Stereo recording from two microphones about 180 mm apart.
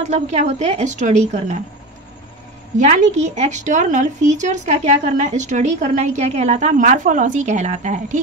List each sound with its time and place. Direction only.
0.0 s speech: 40° right (ahead or behind)
2.8 s speech: 40° right (ahead or behind)